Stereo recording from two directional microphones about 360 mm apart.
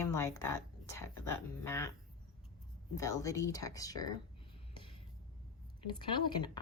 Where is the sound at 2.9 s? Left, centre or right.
Centre.